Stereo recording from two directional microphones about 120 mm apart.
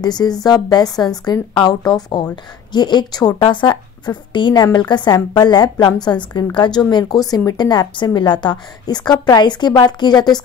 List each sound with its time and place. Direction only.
0.0 s a woman's voice: 35° left (ahead or behind)